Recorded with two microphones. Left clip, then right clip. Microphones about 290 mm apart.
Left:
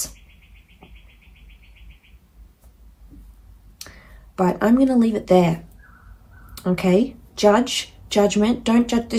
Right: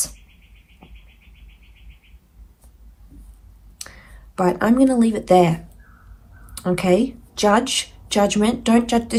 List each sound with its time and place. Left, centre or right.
3.8 s speech: right
6.6 s a woman's voice: right